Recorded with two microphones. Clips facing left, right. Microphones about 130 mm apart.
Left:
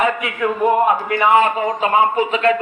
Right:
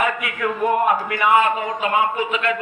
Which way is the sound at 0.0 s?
25° left (ahead or behind).